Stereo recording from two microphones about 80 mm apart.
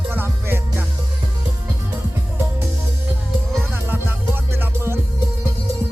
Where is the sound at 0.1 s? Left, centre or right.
Right.